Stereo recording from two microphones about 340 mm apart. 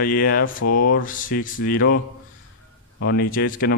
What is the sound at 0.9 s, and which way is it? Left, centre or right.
A man's voice, left.